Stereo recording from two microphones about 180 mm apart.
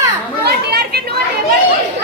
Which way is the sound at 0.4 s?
60° right (ahead or behind).